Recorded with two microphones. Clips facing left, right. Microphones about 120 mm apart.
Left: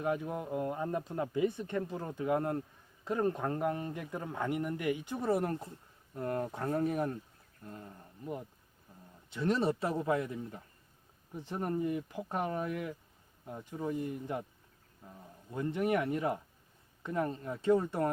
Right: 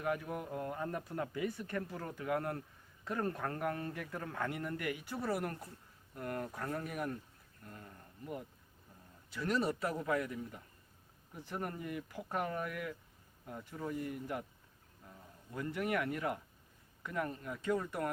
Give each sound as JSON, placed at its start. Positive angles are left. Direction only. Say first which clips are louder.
{"t": 0.0, "sound": "speech", "louder": "left 3 dB", "side_deg": 25}
{"t": 8.9, "sound": "a sound", "louder": "left 4 dB", "side_deg": 15}
{"t": 9.3, "sound": "speech", "louder": "left 4 dB", "side_deg": 25}